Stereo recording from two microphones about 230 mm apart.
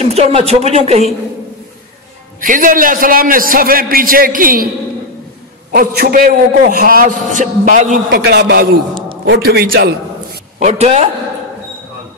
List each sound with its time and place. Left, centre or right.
0.0 s speech: right
2.4 s a man's voice: right
5.7 s a man's voice: right
10.6 s speech: right